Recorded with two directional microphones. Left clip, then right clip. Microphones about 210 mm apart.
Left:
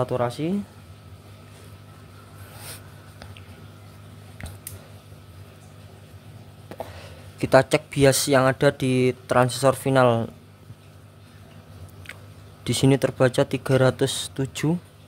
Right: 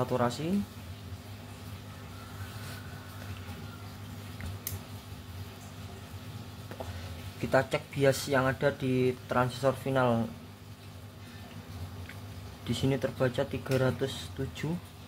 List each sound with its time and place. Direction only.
0.0 s speech: 35° left (ahead or behind)
6.7 s a sound: 25° left (ahead or behind)
7.3 s speech: 45° left (ahead or behind)
12.6 s speech: 55° left (ahead or behind)